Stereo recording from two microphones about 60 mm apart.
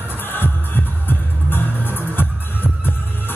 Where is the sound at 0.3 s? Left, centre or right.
Left.